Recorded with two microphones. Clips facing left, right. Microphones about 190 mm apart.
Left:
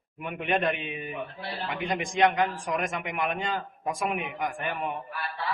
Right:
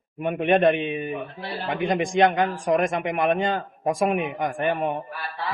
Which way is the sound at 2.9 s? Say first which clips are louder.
Right 8 dB; 45° right (ahead or behind).